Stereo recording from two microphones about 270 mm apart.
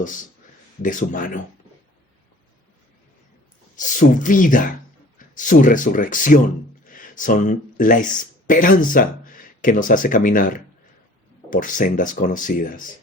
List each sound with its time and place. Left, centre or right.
0.8 s speech: left
3.8 s speech: left
11.5 s speech: left